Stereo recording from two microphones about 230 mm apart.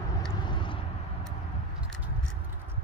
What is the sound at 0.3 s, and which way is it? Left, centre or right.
Vehicle, left.